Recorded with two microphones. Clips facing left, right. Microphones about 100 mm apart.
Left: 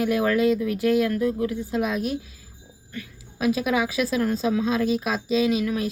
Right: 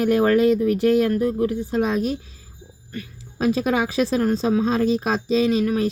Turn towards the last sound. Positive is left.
turn(degrees=-35)  # may be behind; listen again after turning